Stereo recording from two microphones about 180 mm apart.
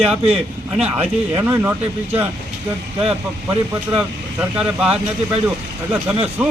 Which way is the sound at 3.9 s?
5° right (ahead or behind).